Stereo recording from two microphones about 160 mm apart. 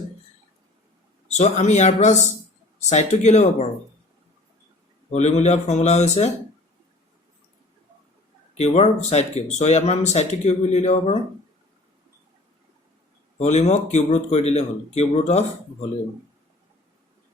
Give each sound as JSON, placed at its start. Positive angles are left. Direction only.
{"t": 1.3, "sound": "speech", "side_deg": 45}
{"t": 5.1, "sound": "speech", "side_deg": 45}
{"t": 8.5, "sound": "speech", "side_deg": 45}
{"t": 13.4, "sound": "speech", "side_deg": 45}